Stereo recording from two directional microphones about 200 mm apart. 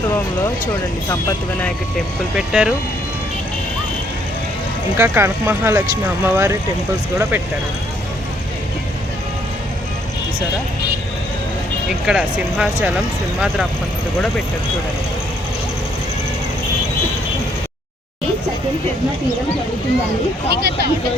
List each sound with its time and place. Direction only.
2.3 s speech: 5° right (ahead or behind)
4.9 s speech: 10° right (ahead or behind)
11.9 s speech: centre (ahead or behind)
20.5 s speech: 55° right (ahead or behind)